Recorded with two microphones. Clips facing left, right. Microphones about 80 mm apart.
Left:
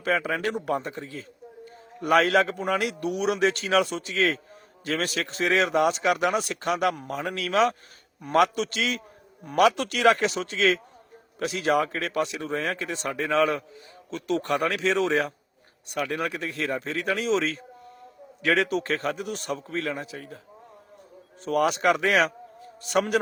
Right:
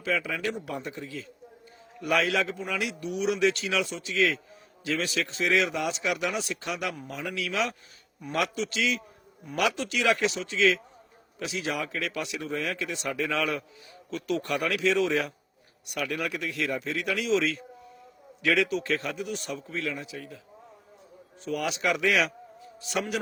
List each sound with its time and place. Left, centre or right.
0.0 s a man's voice: left
21.4 s a man's voice: left